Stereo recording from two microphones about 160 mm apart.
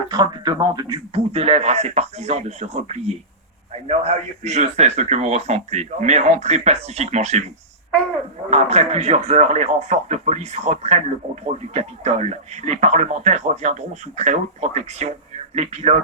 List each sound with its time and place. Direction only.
0.1 s speech: 25° right (ahead or behind)
1.1 s a man's voice: 40° right (ahead or behind)
8.4 s a man's voice: 40° right (ahead or behind)